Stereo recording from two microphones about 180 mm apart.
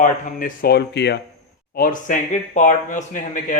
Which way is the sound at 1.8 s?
50° left (ahead or behind).